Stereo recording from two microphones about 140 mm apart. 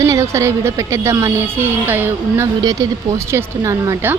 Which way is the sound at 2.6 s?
25° right (ahead or behind).